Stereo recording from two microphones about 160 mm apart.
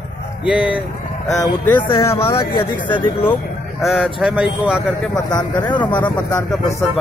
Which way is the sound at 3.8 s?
Centre (ahead or behind).